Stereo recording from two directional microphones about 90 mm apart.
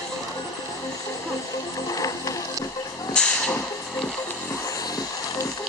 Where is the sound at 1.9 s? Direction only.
40° left (ahead or behind).